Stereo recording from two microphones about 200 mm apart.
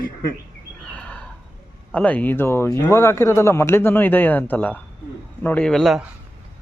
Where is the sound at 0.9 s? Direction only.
5° left (ahead or behind).